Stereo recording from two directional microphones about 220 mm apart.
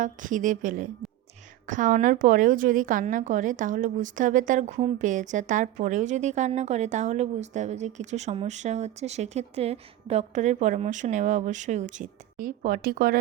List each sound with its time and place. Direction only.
0.0 s a woman's voice: 35° right (ahead or behind)